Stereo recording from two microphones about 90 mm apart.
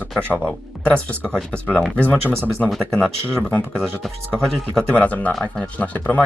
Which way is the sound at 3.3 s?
10° left (ahead or behind).